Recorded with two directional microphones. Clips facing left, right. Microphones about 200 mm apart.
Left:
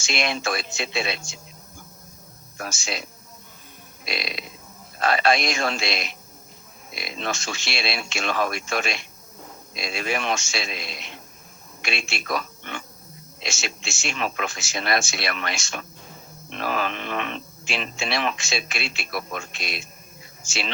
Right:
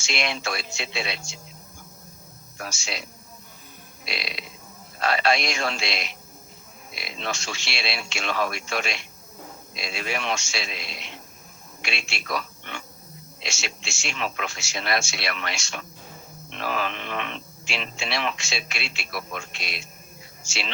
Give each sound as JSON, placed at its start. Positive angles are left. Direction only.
{"t": 0.0, "sound": "speech", "side_deg": 50}
{"t": 2.6, "sound": "speech", "side_deg": 50}
{"t": 4.0, "sound": "a man's voice", "side_deg": 45}